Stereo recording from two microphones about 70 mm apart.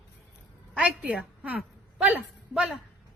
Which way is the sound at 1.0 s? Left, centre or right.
Centre.